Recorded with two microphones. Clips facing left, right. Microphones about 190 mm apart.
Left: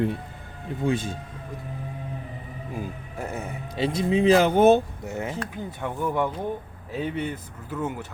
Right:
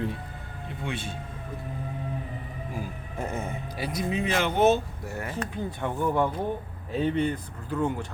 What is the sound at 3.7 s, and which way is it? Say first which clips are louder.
Speech: left 7 dB; 25° left (ahead or behind).